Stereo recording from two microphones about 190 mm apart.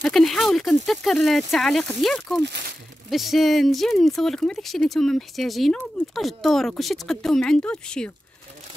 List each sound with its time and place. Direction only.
0.0 s speech: centre (ahead or behind)